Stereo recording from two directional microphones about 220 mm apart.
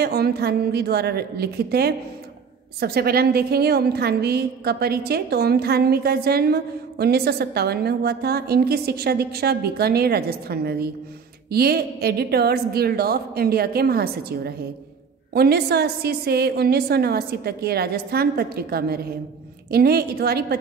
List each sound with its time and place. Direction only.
0.0 s a woman's voice: 45° right (ahead or behind)